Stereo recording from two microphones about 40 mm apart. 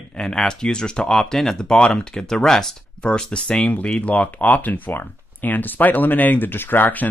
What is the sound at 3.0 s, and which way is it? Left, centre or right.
Speech, left.